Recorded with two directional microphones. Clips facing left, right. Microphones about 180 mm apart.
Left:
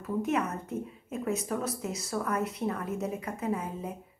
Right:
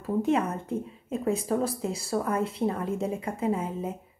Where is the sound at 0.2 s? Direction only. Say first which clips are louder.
Right 4 dB; 30° right (ahead or behind).